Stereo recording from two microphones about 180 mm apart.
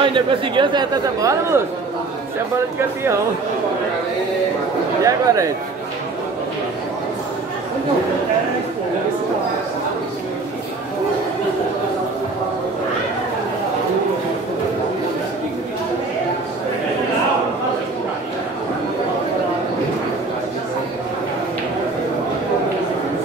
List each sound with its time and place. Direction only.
0.0 s speech: 25° right (ahead or behind)
5.0 s speech: 15° right (ahead or behind)